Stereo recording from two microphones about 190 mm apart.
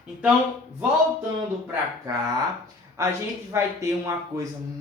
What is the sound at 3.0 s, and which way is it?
Speech, 15° right (ahead or behind).